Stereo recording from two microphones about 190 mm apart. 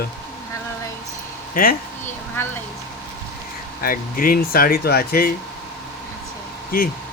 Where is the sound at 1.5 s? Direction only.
50° left (ahead or behind).